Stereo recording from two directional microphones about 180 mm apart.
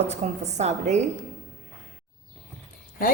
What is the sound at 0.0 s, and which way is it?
A woman's voice, 40° right (ahead or behind).